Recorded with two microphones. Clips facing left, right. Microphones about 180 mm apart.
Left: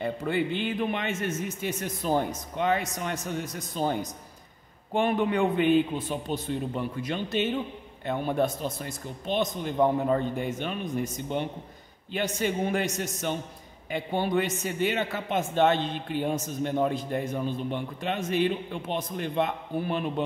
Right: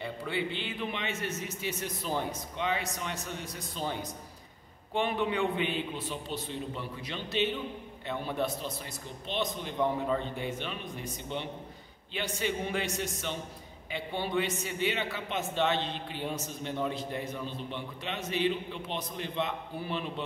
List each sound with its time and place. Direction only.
0.0 s a man's voice: 50° left (ahead or behind)